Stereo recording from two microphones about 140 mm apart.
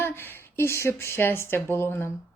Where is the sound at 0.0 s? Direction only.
15° left (ahead or behind).